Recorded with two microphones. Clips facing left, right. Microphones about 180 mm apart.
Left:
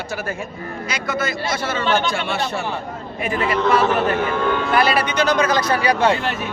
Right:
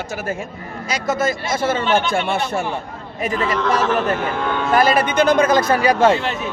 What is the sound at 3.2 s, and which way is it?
A man's voice, 40° right (ahead or behind).